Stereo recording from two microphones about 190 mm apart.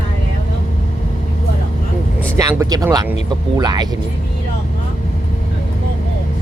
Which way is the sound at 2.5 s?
15° right (ahead or behind).